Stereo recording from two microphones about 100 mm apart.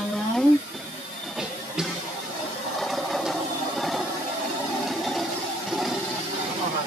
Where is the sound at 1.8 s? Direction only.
5° right (ahead or behind).